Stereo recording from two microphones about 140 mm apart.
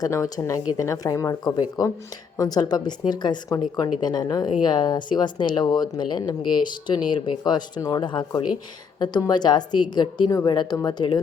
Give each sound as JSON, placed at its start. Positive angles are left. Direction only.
{"t": 0.0, "sound": "a woman's voice", "side_deg": 25}